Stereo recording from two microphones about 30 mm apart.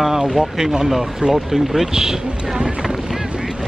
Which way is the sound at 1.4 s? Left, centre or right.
Centre.